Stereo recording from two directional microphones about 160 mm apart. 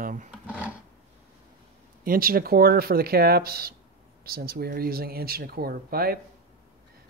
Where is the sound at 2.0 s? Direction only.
65° right (ahead or behind).